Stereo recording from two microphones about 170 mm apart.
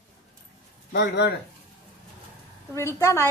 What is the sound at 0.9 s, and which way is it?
Speech, 85° left.